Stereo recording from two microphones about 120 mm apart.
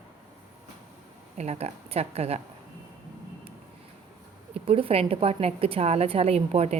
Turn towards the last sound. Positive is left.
turn(degrees=-60)  # may be behind; listen again after turning